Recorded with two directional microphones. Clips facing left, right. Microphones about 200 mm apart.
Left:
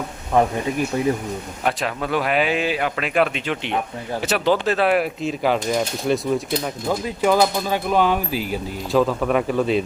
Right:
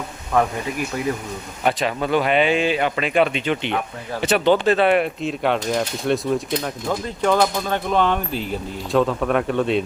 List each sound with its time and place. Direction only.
0.3 s speech: 25° left (ahead or behind)
1.6 s speech: centre (ahead or behind)